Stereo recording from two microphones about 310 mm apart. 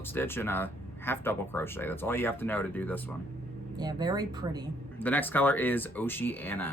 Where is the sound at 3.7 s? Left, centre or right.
Centre.